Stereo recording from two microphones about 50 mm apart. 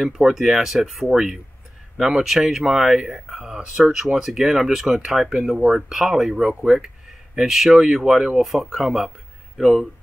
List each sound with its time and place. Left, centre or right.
0.0 s speech: centre